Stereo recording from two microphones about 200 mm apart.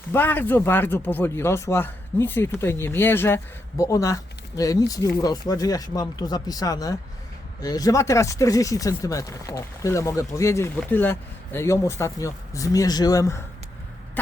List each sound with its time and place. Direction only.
0.1 s speech: 10° left (ahead or behind)